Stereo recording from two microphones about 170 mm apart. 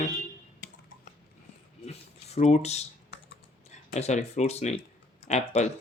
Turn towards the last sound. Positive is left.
turn(degrees=40)  # may be behind; listen again after turning